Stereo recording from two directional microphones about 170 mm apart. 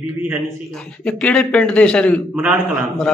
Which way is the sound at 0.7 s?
5° left (ahead or behind).